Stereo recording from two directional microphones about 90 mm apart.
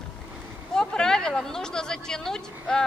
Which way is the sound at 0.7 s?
5° left (ahead or behind).